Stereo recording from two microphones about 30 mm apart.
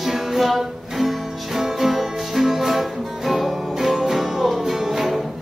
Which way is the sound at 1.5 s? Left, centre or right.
Centre.